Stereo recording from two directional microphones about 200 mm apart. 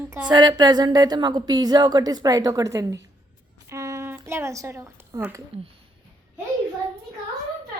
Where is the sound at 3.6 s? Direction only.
15° right (ahead or behind).